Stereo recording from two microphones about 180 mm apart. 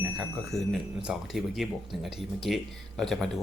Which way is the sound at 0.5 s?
Centre (ahead or behind).